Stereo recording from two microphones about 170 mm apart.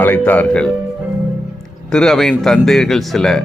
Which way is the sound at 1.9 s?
5° left (ahead or behind).